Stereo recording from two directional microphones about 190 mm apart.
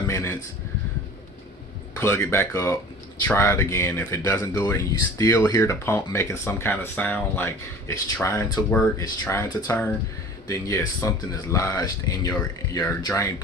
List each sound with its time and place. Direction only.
0.1 s speech: 15° left (ahead or behind)
2.0 s speech: 15° left (ahead or behind)